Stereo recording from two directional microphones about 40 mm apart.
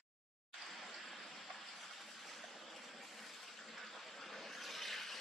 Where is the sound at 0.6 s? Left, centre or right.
Centre.